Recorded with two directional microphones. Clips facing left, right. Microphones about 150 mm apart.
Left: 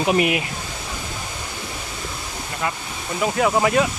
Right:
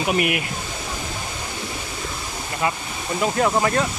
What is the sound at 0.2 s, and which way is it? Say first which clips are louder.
Speech: left 2 dB; 25° left (ahead or behind).